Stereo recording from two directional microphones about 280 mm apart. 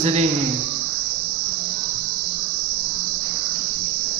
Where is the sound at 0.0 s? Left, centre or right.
Right.